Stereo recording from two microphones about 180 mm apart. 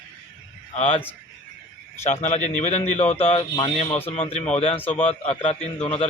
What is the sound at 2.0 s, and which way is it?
A man's voice, 40° left (ahead or behind).